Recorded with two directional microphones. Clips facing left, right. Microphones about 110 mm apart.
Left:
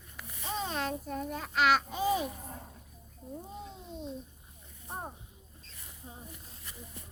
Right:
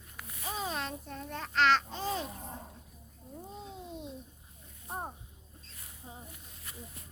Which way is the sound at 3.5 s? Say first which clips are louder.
Left 1 dB; 5° left (ahead or behind).